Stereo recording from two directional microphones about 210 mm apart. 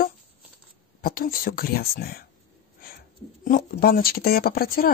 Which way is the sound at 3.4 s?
45° left (ahead or behind).